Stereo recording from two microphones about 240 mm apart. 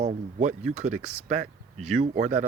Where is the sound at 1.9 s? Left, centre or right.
Right.